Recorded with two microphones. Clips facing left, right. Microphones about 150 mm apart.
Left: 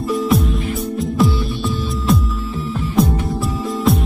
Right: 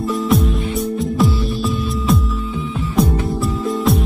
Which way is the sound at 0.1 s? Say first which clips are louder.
Left 1 dB; centre (ahead or behind).